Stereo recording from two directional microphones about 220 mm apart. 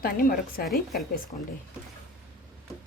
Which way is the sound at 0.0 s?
40° left (ahead or behind).